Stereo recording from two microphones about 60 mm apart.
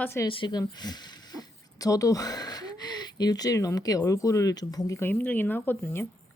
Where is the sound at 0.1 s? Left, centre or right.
Left.